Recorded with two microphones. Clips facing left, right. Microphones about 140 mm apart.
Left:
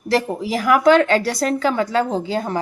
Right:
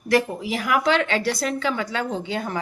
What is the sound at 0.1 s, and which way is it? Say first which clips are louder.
Speech: left 2 dB; 35° left (ahead or behind).